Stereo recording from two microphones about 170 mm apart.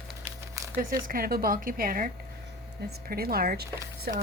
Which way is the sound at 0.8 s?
55° right (ahead or behind).